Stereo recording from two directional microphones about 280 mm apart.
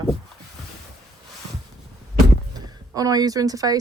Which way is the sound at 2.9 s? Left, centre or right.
Centre.